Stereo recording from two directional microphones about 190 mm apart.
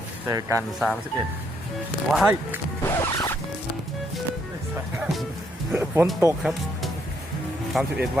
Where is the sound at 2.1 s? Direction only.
5° right (ahead or behind).